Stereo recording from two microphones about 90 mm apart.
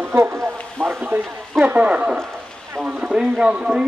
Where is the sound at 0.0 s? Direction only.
25° right (ahead or behind).